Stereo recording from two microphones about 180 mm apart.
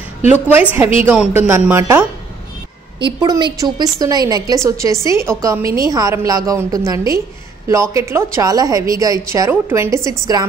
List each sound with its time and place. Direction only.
0.5 s a woman's voice: 10° right (ahead or behind)
3.0 s a woman's voice: 25° right (ahead or behind)